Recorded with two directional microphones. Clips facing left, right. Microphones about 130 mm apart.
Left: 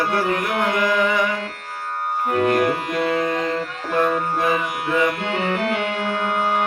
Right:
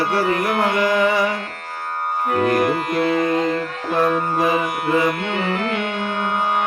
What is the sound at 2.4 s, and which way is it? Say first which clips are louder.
Music: right 1 dB; 40° right (ahead or behind).